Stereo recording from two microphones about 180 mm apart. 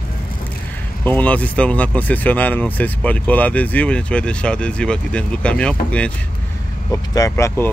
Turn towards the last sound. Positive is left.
turn(degrees=15)  # may be behind; listen again after turning